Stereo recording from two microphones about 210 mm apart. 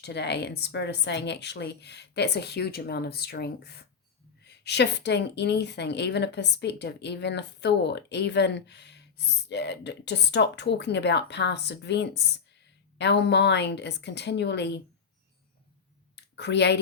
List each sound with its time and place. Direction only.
0.0 s a woman's voice: 55° left (ahead or behind)
16.1 s speech: 55° left (ahead or behind)